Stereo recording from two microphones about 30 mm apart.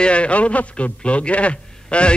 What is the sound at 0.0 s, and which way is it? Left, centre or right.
A man's voice, left.